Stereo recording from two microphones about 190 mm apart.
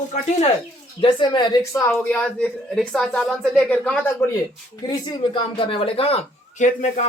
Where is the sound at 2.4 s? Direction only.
Centre (ahead or behind).